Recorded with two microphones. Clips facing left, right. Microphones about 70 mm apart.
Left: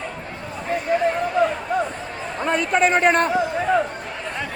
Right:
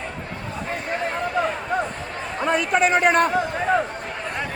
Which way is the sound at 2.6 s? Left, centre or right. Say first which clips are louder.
Left 1 dB; left.